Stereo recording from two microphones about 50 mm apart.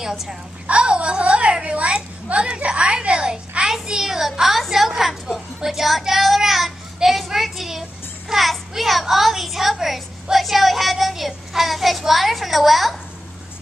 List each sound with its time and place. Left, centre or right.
0.7 s a sound: right; by 5.4 s centre
5.6 s child singing: centre
9.0 s speech: centre
10.3 s child singing: centre